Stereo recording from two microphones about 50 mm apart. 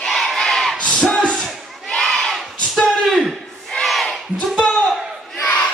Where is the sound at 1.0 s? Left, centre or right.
Centre.